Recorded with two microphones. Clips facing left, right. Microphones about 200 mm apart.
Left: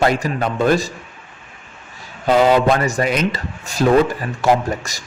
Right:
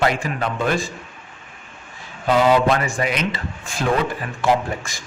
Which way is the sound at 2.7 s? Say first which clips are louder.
Left 3 dB; 40° left (ahead or behind).